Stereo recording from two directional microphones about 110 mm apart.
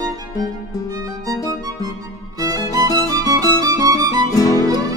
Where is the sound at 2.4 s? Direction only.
35° right (ahead or behind).